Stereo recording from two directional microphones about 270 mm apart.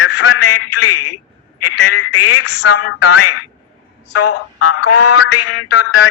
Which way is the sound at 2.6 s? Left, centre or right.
Left.